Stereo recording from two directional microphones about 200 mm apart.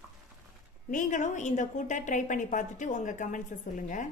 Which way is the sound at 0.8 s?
40° left (ahead or behind).